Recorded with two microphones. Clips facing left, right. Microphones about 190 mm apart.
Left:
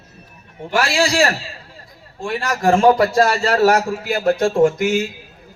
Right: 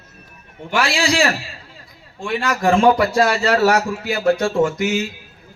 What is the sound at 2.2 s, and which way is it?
A man's voice, 35° left (ahead or behind).